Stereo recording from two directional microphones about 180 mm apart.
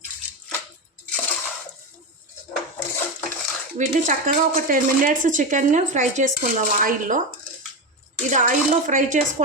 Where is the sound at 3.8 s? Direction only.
45° right (ahead or behind).